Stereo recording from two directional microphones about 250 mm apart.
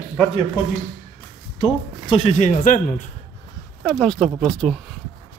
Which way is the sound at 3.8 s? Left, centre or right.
Centre.